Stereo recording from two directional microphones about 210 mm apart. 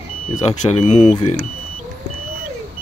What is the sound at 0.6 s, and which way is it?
Speech, 30° left (ahead or behind).